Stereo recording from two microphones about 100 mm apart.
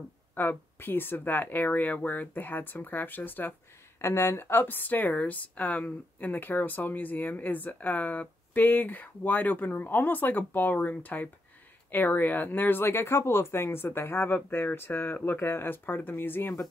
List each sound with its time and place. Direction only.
0.3 s a woman's voice: 20° left (ahead or behind)